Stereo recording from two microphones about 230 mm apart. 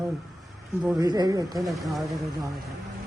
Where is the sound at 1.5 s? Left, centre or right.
Centre.